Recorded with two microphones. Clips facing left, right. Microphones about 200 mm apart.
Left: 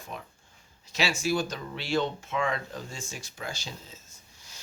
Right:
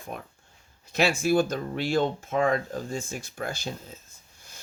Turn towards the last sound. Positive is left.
turn(degrees=-55)  # may be behind; listen again after turning